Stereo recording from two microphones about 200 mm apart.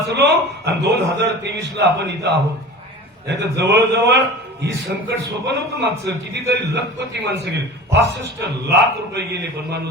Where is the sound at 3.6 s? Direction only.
55° right (ahead or behind).